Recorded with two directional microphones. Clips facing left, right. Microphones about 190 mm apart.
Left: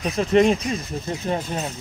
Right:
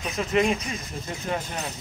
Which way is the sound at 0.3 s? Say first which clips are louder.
Left 6 dB; 35° left (ahead or behind).